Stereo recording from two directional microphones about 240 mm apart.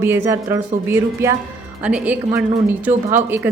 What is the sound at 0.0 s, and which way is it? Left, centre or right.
A woman's voice, centre.